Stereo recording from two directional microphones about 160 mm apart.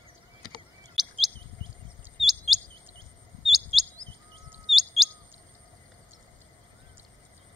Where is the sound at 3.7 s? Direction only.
40° right (ahead or behind).